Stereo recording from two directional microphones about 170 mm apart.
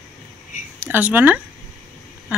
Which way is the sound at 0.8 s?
10° right (ahead or behind).